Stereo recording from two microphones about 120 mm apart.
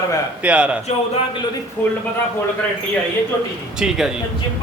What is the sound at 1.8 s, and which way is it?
Speech, 15° left (ahead or behind).